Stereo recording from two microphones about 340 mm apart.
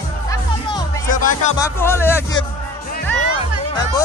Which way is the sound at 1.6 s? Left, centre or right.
Centre.